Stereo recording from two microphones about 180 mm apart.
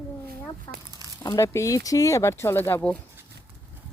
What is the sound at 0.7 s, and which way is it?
Speech, 15° left (ahead or behind).